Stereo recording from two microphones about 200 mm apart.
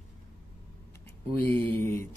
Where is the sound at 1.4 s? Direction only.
10° left (ahead or behind).